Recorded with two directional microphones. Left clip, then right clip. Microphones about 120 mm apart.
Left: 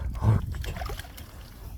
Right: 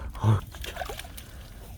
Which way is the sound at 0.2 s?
15° right (ahead or behind).